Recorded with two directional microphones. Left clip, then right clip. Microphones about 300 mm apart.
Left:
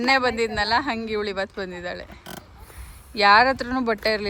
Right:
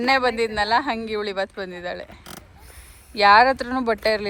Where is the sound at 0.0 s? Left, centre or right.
Centre.